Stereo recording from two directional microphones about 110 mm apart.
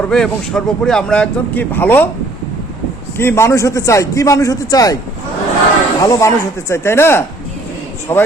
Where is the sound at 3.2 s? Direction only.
25° left (ahead or behind).